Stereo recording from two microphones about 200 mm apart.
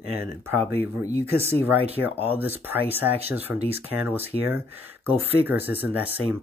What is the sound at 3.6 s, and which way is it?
Speech, 30° right (ahead or behind).